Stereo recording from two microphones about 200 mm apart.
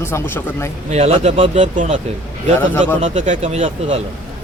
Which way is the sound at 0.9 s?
30° right (ahead or behind).